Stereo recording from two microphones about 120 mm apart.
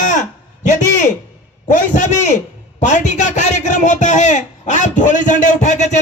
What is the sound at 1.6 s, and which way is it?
A man's voice, 90° left.